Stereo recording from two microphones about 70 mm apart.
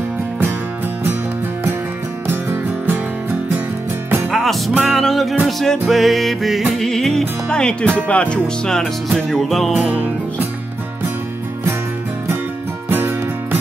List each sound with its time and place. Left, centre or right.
4.3 s music: centre
6.8 s speech: centre
9.8 s music: right
12.9 s music: right